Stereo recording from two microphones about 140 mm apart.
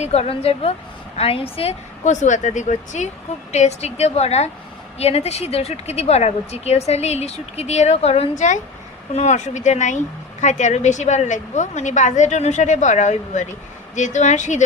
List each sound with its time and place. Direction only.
0.0 s speech: 50° left (ahead or behind)
2.0 s a woman's voice: 60° left (ahead or behind)